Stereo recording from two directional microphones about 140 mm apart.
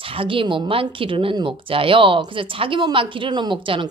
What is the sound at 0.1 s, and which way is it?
Speech, 40° right (ahead or behind).